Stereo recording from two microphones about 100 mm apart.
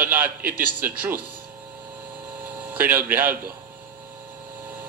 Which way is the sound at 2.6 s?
20° right (ahead or behind).